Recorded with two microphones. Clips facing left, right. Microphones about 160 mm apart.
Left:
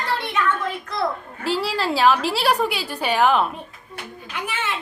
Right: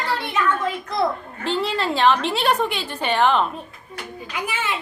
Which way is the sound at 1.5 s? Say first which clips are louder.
Even; 5° left (ahead or behind).